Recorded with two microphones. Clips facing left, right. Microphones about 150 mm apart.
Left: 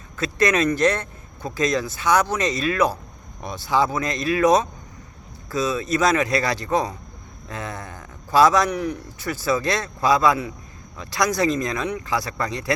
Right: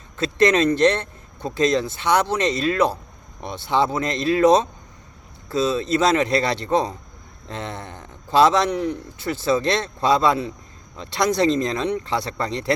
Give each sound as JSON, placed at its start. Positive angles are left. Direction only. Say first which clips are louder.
{"t": 0.2, "sound": "a man's voice", "louder": "right 3 dB", "side_deg": -25}